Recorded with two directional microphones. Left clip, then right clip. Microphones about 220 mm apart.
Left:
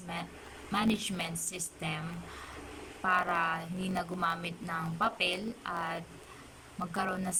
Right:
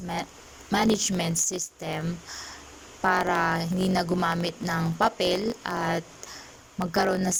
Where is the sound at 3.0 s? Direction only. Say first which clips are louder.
Right 6 dB; 30° right (ahead or behind).